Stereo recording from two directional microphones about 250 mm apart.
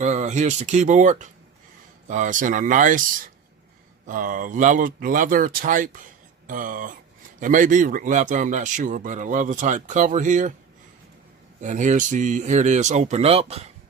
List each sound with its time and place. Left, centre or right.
0.0 s speech: right
4.0 s speech: right
11.6 s speech: right